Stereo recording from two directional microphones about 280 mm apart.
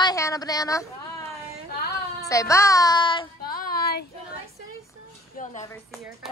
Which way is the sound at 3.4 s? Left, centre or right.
Left.